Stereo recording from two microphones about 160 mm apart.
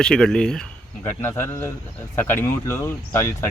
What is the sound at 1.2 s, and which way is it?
Speech, 15° left (ahead or behind).